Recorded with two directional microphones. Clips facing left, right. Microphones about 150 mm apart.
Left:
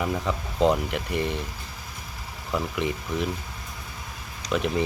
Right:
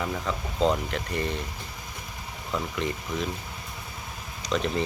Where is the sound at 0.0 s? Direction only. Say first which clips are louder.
Left 3 dB; 15° left (ahead or behind).